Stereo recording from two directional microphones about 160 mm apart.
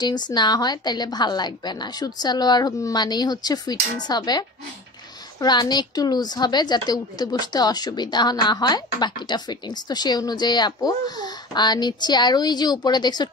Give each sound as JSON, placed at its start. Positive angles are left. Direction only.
{"t": 0.0, "sound": "a woman's voice", "side_deg": 25}